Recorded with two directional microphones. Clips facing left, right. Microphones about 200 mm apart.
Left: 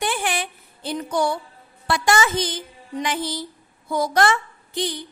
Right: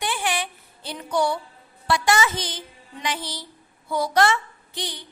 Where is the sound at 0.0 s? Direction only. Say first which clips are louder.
Left 2 dB; 50° left (ahead or behind).